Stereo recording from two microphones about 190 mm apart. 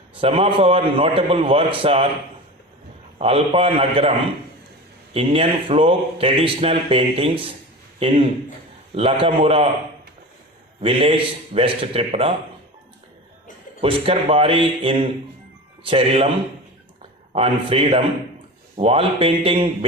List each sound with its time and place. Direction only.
0.1 s speech: 30° right (ahead or behind)
3.2 s speech: 30° right (ahead or behind)
5.1 s speech: 30° right (ahead or behind)
10.8 s speech: 30° right (ahead or behind)
13.8 s speech: 30° right (ahead or behind)
17.3 s a man's voice: 30° right (ahead or behind)